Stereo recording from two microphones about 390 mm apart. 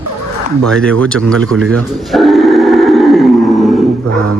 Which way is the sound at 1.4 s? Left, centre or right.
Right.